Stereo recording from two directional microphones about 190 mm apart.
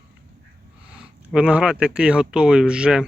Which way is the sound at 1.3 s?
5° right (ahead or behind).